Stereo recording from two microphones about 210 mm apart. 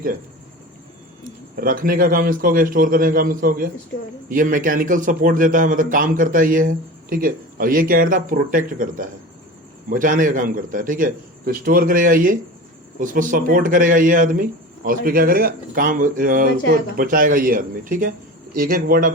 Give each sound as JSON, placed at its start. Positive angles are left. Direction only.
{"t": 1.2, "sound": "a man's voice", "side_deg": -40}